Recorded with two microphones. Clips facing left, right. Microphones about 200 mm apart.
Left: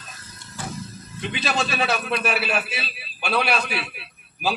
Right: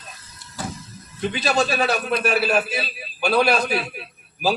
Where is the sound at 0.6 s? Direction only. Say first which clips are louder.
Right 3 dB; 40° right (ahead or behind).